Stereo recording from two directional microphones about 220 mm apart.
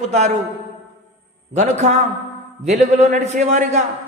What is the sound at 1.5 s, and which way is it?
A man's voice, 30° right (ahead or behind).